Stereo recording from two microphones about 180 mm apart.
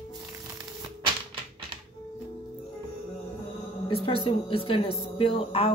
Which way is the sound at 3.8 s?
30° left (ahead or behind).